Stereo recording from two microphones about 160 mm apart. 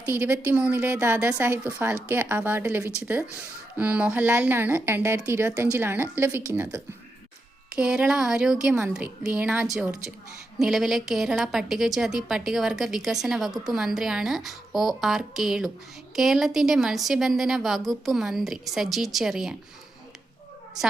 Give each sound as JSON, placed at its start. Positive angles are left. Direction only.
{"t": 0.1, "sound": "a woman's voice", "side_deg": -15}